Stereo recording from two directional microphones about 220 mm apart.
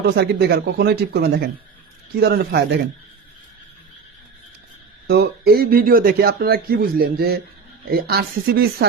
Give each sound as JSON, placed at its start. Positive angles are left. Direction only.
{"t": 0.2, "sound": "speech", "side_deg": -50}
{"t": 5.0, "sound": "speech", "side_deg": -45}